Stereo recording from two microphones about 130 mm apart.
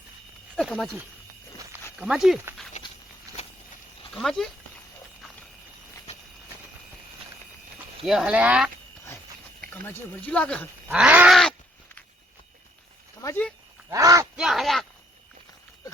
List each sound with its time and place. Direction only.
0.5 s speech: 5° left (ahead or behind)
2.0 s speech: 5° right (ahead or behind)
3.3 s a sound: 25° right (ahead or behind)
4.1 s speech: centre (ahead or behind)
8.0 s speech: 5° right (ahead or behind)
9.8 s speech: 10° left (ahead or behind)
10.9 s a sound: 10° right (ahead or behind)
13.2 s speech: 15° left (ahead or behind)
13.9 s speech: 25° right (ahead or behind)
14.3 s speech: centre (ahead or behind)